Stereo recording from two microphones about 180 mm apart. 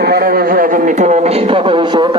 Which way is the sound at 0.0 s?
60° right (ahead or behind).